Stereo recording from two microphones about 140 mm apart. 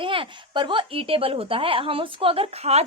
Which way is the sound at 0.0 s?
40° right (ahead or behind).